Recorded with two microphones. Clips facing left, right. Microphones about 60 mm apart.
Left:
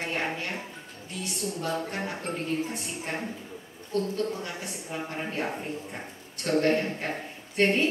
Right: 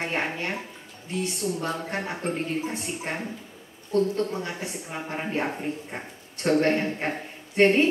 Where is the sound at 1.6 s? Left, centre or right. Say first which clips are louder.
Right 1 dB; right.